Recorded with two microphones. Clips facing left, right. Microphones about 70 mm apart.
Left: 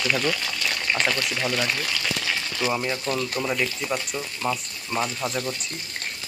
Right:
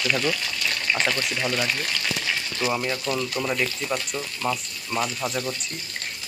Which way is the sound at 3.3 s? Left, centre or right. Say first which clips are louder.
Even; centre.